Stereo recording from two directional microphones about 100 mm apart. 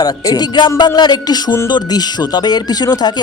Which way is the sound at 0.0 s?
40° left (ahead or behind).